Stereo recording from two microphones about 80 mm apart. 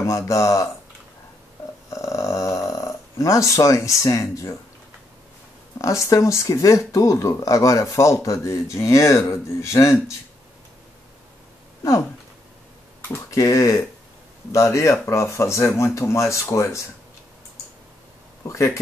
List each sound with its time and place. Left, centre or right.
0.0 s speech: left
1.9 s snoring: left
5.8 s speech: left
13.3 s speech: left
18.4 s speech: left